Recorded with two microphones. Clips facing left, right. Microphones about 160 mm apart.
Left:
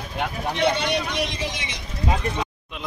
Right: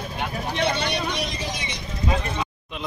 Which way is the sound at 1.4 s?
90° left.